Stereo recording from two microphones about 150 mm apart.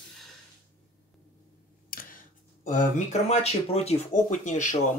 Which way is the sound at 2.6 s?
50° left (ahead or behind).